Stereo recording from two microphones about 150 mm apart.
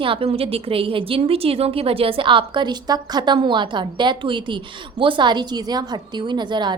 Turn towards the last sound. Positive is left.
turn(degrees=-30)  # may be behind; listen again after turning